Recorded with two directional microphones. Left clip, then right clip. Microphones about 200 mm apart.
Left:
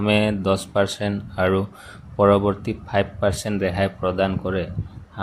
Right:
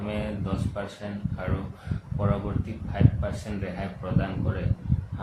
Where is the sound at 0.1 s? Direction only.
65° left (ahead or behind).